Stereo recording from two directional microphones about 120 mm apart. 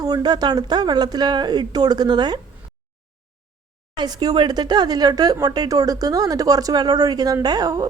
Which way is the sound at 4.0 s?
35° right (ahead or behind).